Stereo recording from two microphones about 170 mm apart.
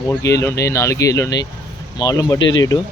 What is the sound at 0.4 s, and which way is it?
A man's voice, 20° left (ahead or behind).